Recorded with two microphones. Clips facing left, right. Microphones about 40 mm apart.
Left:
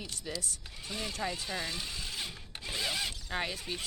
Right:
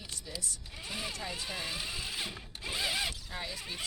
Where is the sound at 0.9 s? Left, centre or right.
Centre.